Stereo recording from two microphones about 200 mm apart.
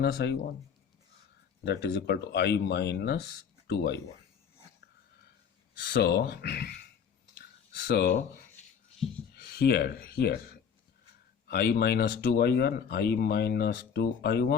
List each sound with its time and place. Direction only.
0.0 s speech: 55° left (ahead or behind)
1.6 s speech: 55° left (ahead or behind)
5.8 s speech: 55° left (ahead or behind)
7.3 s a sound: 55° left (ahead or behind)
9.3 s speech: 50° left (ahead or behind)
11.4 s speech: 50° left (ahead or behind)